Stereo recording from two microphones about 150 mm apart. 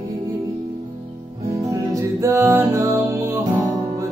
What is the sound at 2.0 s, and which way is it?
Music, 20° right (ahead or behind).